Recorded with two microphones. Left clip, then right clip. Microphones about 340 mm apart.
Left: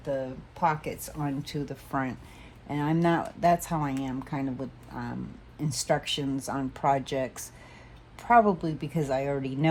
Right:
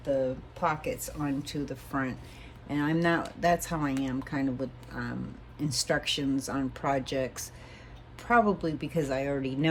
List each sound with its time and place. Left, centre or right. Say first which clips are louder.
0.5 s speech: left 6 dB; left